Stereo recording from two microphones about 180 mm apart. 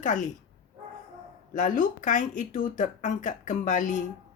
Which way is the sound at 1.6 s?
45° left (ahead or behind).